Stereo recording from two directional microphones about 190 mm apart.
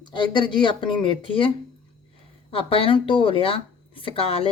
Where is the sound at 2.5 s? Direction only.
30° left (ahead or behind).